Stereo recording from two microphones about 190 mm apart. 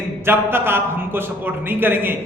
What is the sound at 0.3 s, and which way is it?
A man's voice, 10° right (ahead or behind).